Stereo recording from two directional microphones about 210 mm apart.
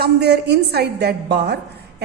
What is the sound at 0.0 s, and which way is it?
A woman's voice, 50° right (ahead or behind).